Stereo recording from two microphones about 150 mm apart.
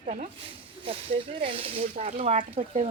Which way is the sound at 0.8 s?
40° right (ahead or behind).